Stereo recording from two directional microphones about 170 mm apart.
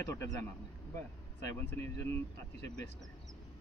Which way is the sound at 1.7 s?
15° left (ahead or behind).